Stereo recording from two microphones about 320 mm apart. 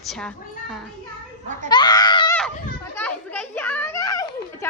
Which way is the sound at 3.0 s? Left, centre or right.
Centre.